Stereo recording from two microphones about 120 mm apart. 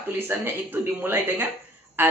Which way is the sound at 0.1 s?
15° right (ahead or behind).